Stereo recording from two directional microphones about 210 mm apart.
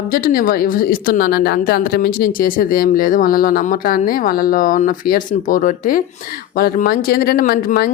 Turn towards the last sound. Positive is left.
turn(degrees=45)  # may be behind; listen again after turning